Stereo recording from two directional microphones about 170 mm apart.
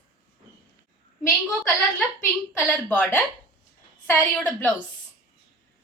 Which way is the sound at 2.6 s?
5° left (ahead or behind).